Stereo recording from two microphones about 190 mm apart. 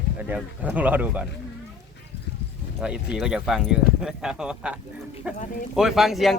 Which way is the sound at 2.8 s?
5° right (ahead or behind).